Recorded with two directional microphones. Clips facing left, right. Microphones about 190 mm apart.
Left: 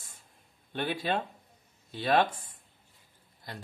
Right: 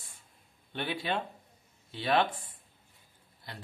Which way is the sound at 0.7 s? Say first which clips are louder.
Left 3 dB; 45° left (ahead or behind).